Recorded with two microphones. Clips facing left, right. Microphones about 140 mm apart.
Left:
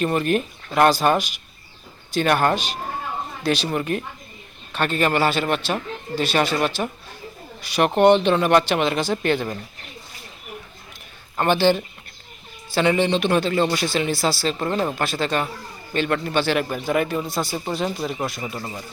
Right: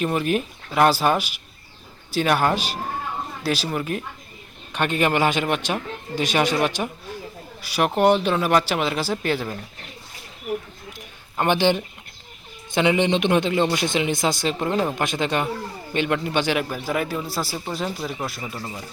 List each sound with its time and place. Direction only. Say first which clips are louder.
0.0 s speech: left 2 dB; 5° right (ahead or behind)
4.7 s a man's voice: even; 15° right (ahead or behind)
11.3 s a man's voice: left 1 dB; 15° right (ahead or behind)
16.6 s speech: left 3 dB; 5° right (ahead or behind)